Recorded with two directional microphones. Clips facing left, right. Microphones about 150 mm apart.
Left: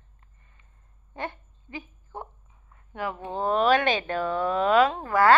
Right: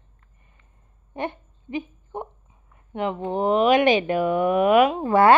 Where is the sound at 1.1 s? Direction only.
20° right (ahead or behind).